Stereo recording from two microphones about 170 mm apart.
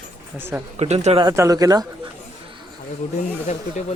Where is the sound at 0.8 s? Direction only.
40° right (ahead or behind).